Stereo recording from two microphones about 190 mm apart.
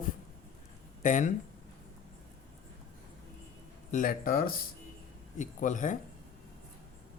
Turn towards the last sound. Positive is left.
turn(degrees=40)  # may be behind; listen again after turning